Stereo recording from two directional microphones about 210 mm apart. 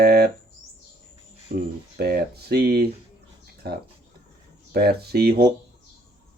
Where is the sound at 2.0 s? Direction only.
50° right (ahead or behind).